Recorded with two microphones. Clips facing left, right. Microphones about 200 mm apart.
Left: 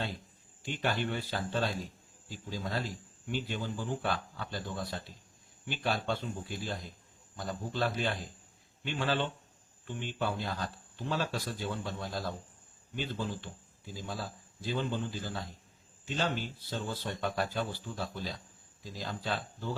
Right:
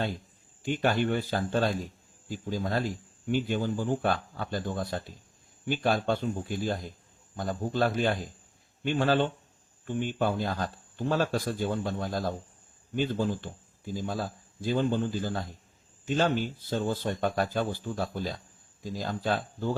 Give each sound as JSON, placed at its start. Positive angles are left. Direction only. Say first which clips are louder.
{"t": 0.6, "sound": "speech", "louder": "right 7 dB", "side_deg": -50}